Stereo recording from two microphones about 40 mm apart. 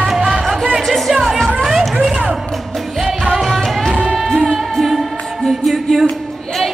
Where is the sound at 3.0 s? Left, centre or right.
Centre.